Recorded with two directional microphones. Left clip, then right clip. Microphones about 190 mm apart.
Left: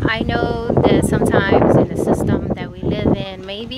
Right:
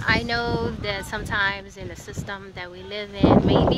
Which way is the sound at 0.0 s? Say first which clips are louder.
Left 4 dB; 20° left (ahead or behind).